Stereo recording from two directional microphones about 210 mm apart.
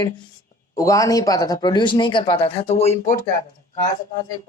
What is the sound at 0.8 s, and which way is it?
Speech, 15° left (ahead or behind).